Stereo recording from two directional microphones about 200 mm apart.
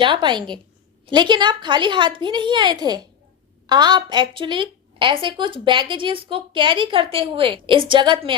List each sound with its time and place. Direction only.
0.0 s a woman's voice: 25° right (ahead or behind)